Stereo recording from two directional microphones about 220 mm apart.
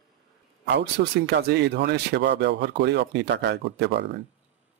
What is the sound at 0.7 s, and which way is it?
Speech, 50° right (ahead or behind).